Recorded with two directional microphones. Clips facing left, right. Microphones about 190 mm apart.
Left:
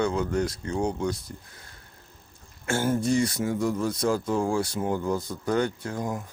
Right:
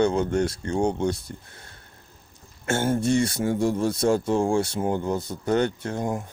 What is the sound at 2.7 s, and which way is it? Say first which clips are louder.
Speech: right 2 dB; 25° right (ahead or behind).